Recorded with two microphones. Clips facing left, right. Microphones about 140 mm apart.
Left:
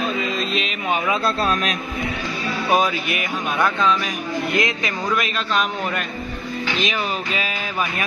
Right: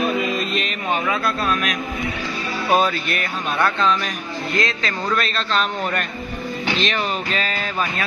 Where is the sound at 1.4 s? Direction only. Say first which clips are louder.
Left 1 dB; 30° left (ahead or behind).